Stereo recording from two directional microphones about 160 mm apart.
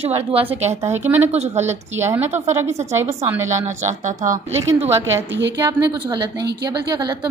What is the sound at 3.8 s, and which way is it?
Speech, 55° right (ahead or behind).